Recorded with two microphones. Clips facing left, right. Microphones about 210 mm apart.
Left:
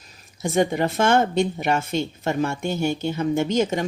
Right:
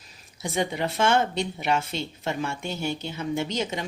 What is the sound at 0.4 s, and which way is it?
Speech, 45° left (ahead or behind).